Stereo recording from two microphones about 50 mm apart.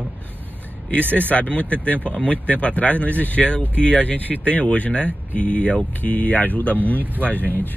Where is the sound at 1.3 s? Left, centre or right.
Left.